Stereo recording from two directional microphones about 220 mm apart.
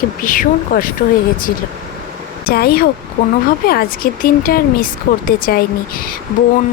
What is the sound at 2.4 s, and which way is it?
Speech, 45° left (ahead or behind).